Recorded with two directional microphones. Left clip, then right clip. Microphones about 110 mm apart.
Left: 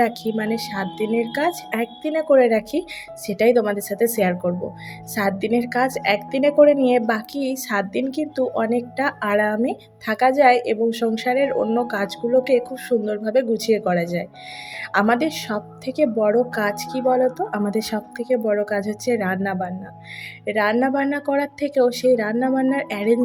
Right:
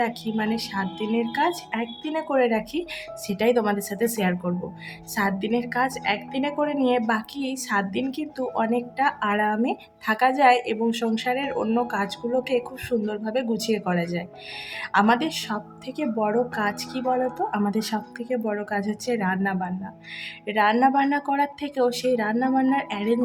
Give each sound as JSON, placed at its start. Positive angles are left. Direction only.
{"t": 0.0, "sound": "a woman's voice", "side_deg": 30}
{"t": 11.6, "sound": "speech", "side_deg": 15}
{"t": 11.9, "sound": "a woman's voice", "side_deg": 30}